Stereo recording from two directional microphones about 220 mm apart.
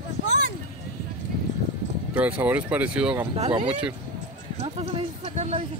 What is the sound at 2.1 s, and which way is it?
Speech, 5° right (ahead or behind).